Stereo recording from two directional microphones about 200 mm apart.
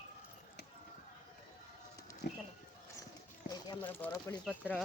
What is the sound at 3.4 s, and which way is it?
Speech, 20° left (ahead or behind).